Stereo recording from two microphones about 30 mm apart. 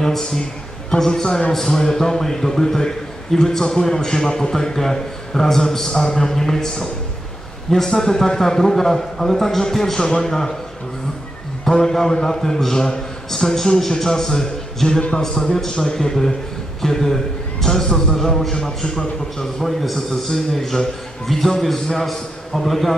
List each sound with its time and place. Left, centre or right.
0.0 s a man's voice: centre
7.7 s a man's voice: centre
11.7 s a man's voice: centre
19.6 s a man's voice: centre